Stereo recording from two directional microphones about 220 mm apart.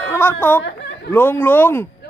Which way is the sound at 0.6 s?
55° left (ahead or behind).